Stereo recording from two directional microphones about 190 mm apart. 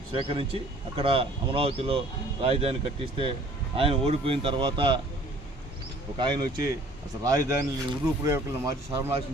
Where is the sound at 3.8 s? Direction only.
30° right (ahead or behind).